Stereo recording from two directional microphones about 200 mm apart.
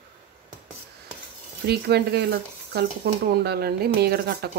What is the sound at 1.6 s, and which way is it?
Speech, 55° right (ahead or behind).